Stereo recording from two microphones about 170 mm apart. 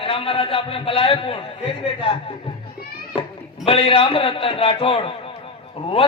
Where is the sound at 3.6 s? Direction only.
30° left (ahead or behind).